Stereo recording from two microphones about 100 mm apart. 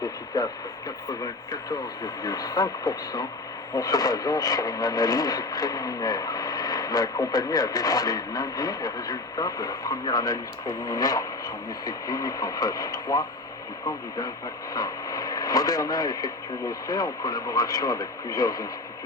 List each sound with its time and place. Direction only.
0.3 s speech: 40° left (ahead or behind)
14.7 s speech: 40° left (ahead or behind)